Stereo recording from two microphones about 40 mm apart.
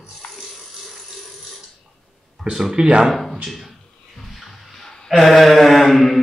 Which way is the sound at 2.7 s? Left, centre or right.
Right.